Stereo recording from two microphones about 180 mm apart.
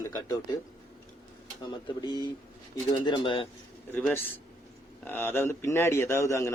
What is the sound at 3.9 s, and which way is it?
A man's voice, 10° left (ahead or behind).